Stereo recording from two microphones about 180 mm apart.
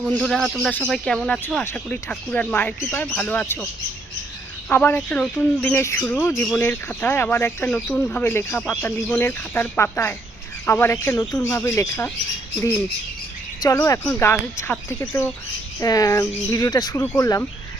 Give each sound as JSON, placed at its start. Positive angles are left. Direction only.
{"t": 0.0, "sound": "speech", "side_deg": 0}
{"t": 4.7, "sound": "speech", "side_deg": 10}
{"t": 13.6, "sound": "speech", "side_deg": 15}